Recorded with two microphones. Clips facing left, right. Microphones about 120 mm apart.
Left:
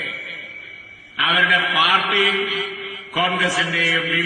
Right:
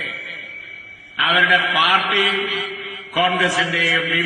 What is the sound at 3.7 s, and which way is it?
Mantra, 25° left (ahead or behind).